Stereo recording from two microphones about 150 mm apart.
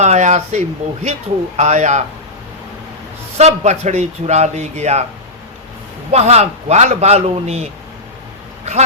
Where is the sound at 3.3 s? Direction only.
50° right (ahead or behind).